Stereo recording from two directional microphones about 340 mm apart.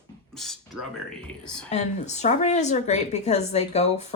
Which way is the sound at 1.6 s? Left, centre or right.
Centre.